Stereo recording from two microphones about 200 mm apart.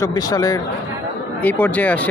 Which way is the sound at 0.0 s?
15° left (ahead or behind).